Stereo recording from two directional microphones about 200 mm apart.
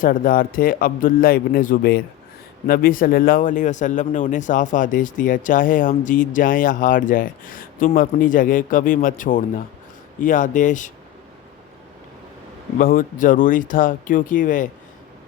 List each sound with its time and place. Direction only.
0.0 s speech: 45° left (ahead or behind)
12.8 s speech: 45° left (ahead or behind)